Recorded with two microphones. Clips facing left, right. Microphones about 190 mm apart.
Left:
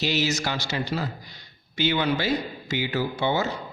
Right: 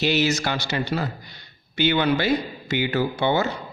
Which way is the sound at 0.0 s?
60° right (ahead or behind).